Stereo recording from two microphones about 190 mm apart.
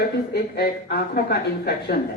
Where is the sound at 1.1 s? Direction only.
55° left (ahead or behind).